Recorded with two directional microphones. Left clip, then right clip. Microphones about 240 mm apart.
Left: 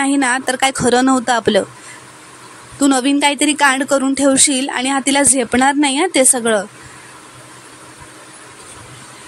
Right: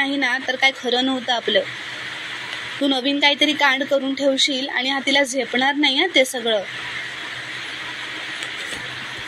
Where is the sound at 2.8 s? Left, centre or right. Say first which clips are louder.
Left 5 dB; left.